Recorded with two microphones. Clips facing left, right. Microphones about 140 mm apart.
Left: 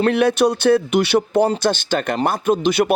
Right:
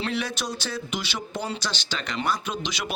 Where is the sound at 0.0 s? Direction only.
60° left (ahead or behind).